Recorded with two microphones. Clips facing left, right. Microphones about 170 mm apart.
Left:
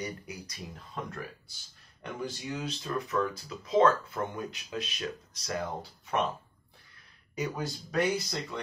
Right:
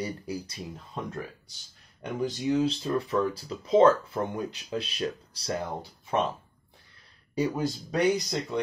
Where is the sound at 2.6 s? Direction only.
30° right (ahead or behind).